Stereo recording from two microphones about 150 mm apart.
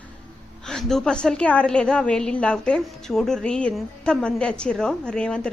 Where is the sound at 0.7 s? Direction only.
5° left (ahead or behind).